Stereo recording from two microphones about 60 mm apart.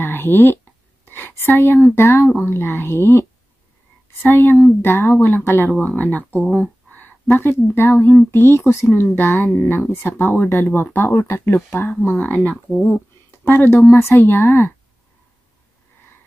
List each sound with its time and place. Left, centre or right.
0.0 s speech: left
1.0 s a sound: left
2.0 s speech: left
5.9 s speech: left
7.3 s speech: left
8.3 s speech: left
12.2 s speech: left